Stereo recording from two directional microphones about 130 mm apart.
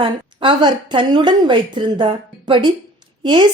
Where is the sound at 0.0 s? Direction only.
40° right (ahead or behind).